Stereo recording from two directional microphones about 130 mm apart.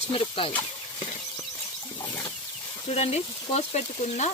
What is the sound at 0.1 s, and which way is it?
Speech, 40° left (ahead or behind).